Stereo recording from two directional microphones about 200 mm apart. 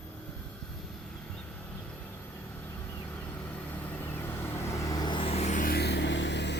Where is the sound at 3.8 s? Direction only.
10° left (ahead or behind).